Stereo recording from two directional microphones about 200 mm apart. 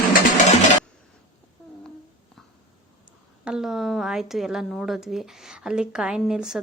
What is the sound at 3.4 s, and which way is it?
A woman's voice, centre (ahead or behind).